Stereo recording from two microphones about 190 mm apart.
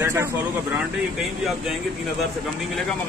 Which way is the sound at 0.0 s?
15° right (ahead or behind).